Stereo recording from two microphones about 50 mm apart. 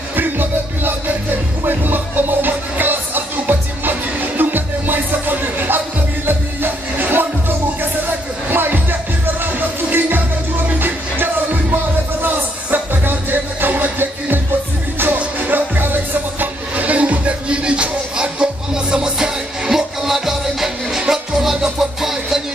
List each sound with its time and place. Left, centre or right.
0.1 s music: right
11.7 s music: right; by 22.4 s centre